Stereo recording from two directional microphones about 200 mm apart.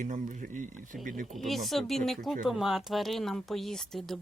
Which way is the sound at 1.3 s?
Centre (ahead or behind).